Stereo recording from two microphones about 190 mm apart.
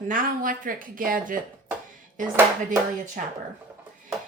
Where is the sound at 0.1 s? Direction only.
45° right (ahead or behind).